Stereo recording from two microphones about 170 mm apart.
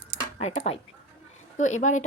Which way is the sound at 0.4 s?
40° left (ahead or behind).